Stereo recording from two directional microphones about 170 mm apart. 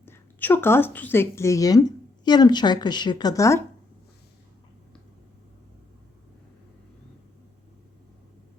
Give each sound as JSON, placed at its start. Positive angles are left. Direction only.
{"t": 0.0, "sound": "a woman's voice", "side_deg": 10}